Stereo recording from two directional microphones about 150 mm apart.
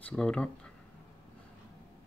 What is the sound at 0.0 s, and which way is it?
Speech, 5° left (ahead or behind).